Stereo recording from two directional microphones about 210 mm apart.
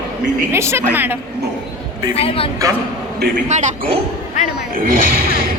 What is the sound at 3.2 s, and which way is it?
Speech, 35° right (ahead or behind).